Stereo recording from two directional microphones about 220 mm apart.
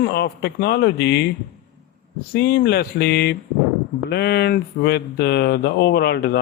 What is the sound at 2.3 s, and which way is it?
Speech, 50° left (ahead or behind).